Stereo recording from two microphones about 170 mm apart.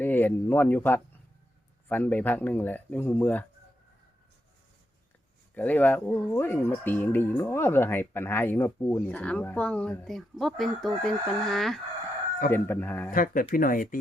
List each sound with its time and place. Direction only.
0.0 s speech: 10° left (ahead or behind)
5.5 s speech: 10° left (ahead or behind)
12.5 s speech: 10° left (ahead or behind)
13.1 s speech: 55° left (ahead or behind)